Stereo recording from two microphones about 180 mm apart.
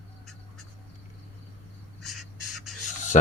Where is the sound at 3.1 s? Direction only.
40° left (ahead or behind).